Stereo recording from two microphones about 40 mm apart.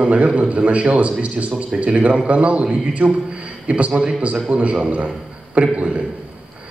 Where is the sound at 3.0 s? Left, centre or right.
Right.